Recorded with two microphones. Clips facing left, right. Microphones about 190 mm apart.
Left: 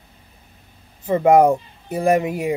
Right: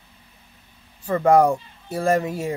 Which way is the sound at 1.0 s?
20° left (ahead or behind).